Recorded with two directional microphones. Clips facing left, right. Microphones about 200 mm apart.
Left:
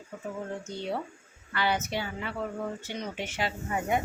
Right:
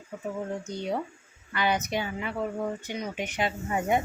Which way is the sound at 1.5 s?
15° right (ahead or behind).